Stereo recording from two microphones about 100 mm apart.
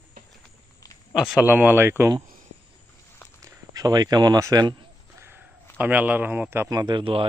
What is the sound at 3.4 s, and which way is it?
Speech, 40° right (ahead or behind).